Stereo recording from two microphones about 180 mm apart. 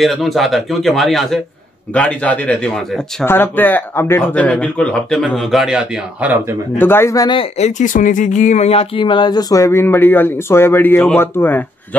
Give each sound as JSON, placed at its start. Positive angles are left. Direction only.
{"t": 0.0, "sound": "speech", "side_deg": 0}
{"t": 6.8, "sound": "speech", "side_deg": 15}
{"t": 7.5, "sound": "speech", "side_deg": 40}